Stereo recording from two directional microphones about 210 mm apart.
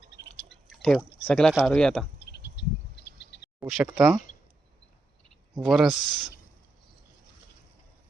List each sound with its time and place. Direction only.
0.4 s speech: centre (ahead or behind)
2.6 s a sound: 55° left (ahead or behind)
3.7 s speech: centre (ahead or behind)
5.6 s speech: centre (ahead or behind)